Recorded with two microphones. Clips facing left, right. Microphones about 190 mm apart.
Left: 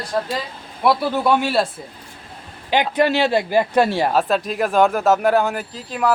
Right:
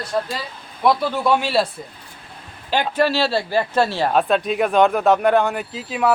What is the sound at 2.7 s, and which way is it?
Speech, 15° left (ahead or behind).